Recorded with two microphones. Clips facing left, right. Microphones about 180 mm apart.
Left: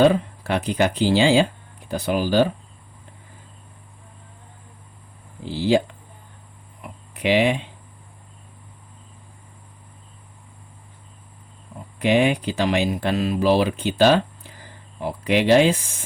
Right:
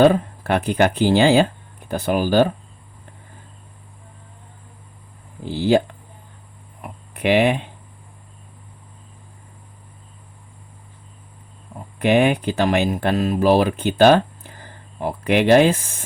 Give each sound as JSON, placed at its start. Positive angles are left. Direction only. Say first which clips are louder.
{"t": 0.0, "sound": "speech", "louder": "right 2 dB", "side_deg": -50}
{"t": 5.5, "sound": "speech", "louder": "right 2 dB", "side_deg": -50}
{"t": 6.8, "sound": "a sound", "louder": "right 2 dB", "side_deg": -55}
{"t": 11.9, "sound": "speech", "louder": "right 2 dB", "side_deg": -55}